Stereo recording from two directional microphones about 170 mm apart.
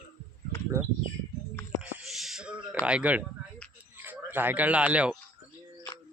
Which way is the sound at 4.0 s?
10° right (ahead or behind).